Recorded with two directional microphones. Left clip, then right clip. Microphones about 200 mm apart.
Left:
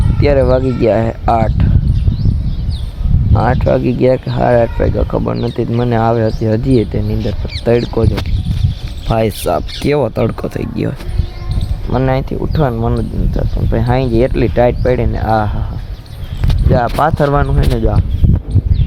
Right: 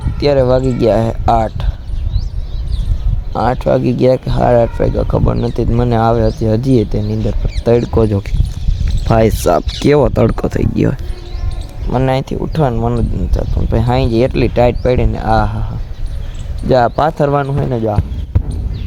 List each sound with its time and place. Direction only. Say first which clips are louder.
0.2 s speech: even; 10° right (ahead or behind)
3.3 s speech: even; 15° right (ahead or behind)
9.0 s speech: right 3 dB; 35° right (ahead or behind)
11.9 s speech: even; 10° right (ahead or behind)
17.0 s speech: even; 10° right (ahead or behind)